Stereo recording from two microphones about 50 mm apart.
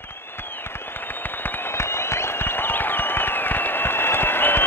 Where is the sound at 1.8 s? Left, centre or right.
Left.